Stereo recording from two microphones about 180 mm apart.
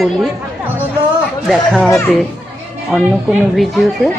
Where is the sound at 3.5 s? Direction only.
Centre (ahead or behind).